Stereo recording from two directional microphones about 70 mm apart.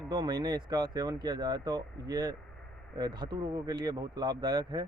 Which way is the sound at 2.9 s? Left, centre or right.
Right.